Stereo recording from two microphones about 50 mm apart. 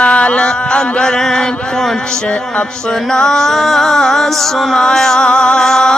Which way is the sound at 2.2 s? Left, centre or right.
Centre.